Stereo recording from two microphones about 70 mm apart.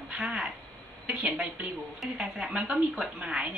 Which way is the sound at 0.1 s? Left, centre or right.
Centre.